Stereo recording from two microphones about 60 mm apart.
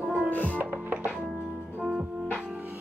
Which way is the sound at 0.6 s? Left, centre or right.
Right.